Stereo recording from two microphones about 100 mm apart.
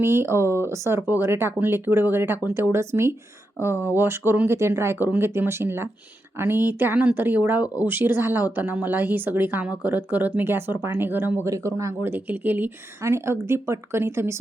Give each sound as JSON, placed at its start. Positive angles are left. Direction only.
{"t": 0.0, "sound": "speech", "side_deg": -25}
{"t": 11.4, "sound": "speech", "side_deg": -30}
{"t": 12.1, "sound": "speech", "side_deg": -20}